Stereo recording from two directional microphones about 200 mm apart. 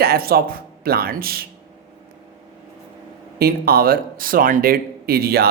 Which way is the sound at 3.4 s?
50° right (ahead or behind).